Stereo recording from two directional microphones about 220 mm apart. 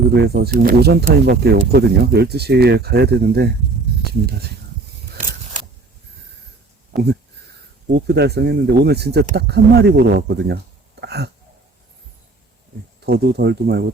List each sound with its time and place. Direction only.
0.1 s speech: 45° right (ahead or behind)
6.9 s speech: 50° right (ahead or behind)
11.0 s a sound: 45° right (ahead or behind)
13.0 s speech: 45° right (ahead or behind)